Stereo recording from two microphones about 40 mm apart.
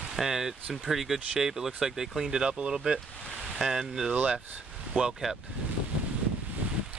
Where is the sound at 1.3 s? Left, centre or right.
Centre.